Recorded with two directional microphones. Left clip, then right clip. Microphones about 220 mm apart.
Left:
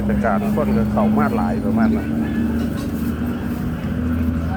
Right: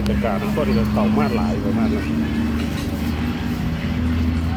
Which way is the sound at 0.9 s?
10° right (ahead or behind).